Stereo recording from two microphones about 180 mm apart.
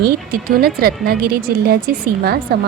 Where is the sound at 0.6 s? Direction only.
55° right (ahead or behind).